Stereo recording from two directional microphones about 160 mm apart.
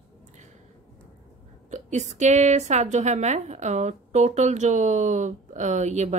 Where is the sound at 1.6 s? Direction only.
45° right (ahead or behind).